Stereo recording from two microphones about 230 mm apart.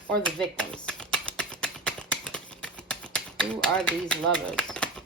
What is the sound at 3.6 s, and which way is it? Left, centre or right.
Speech, centre.